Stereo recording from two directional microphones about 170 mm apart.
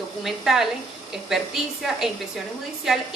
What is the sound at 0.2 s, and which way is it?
A woman's voice, centre (ahead or behind).